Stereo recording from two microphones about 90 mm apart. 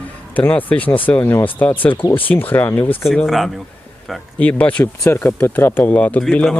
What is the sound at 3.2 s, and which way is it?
Speech, centre (ahead or behind).